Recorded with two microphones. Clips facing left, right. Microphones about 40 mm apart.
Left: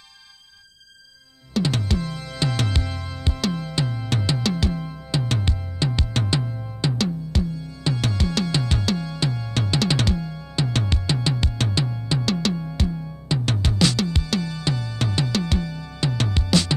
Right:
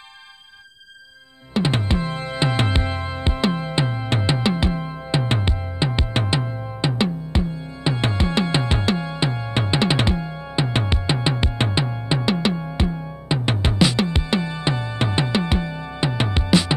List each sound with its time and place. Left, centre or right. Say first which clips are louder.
1.5 s music: right 2 dB; right